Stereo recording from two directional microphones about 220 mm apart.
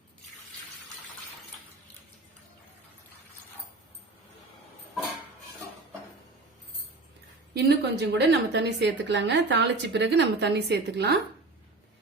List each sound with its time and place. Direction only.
7.5 s a woman's voice: 50° right (ahead or behind)